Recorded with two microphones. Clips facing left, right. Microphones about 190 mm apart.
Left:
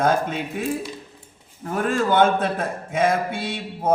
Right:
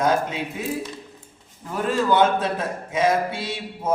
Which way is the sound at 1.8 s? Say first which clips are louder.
Even; 50° left (ahead or behind).